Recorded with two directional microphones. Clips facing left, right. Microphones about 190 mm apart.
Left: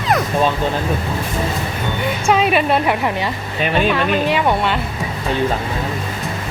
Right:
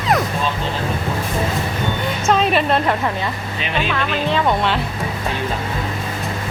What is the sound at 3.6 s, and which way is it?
Speech, 50° left (ahead or behind).